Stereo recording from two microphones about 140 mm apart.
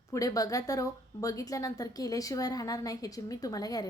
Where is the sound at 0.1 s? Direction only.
25° left (ahead or behind).